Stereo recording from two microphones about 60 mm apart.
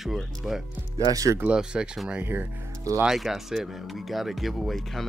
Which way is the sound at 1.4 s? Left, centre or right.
Centre.